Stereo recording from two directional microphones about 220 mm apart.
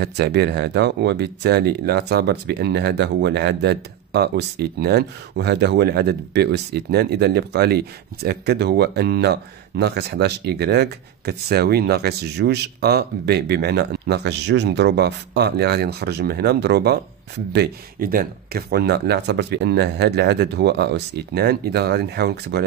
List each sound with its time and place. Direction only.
0.0 s speech: 50° right (ahead or behind)